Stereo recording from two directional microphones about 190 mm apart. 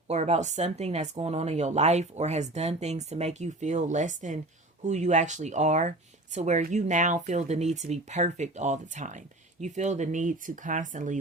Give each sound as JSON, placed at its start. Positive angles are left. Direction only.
{"t": 0.1, "sound": "speech", "side_deg": -35}